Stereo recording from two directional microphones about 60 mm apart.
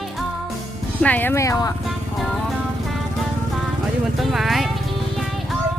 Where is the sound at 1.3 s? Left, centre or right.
Left.